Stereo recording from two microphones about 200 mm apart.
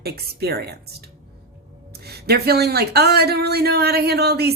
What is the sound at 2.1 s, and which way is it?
Speech, 50° right (ahead or behind).